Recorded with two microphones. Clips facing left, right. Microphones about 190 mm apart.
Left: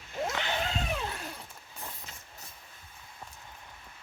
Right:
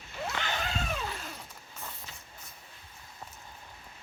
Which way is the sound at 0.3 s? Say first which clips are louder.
Left 2 dB; 20° left (ahead or behind).